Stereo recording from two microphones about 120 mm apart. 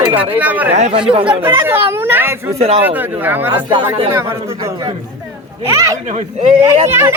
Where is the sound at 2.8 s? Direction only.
15° right (ahead or behind).